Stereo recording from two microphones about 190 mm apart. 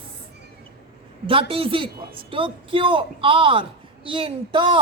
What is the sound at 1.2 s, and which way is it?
A woman's voice, 30° right (ahead or behind).